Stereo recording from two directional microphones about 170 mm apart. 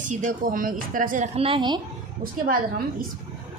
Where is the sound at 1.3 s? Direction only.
30° right (ahead or behind).